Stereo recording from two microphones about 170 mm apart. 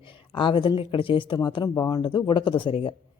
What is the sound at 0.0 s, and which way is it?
Speech, 30° left (ahead or behind).